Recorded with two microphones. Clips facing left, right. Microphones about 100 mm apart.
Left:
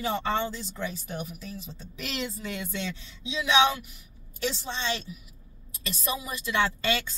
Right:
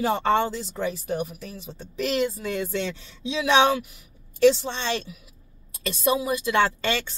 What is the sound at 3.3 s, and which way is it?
Speech, 60° right (ahead or behind).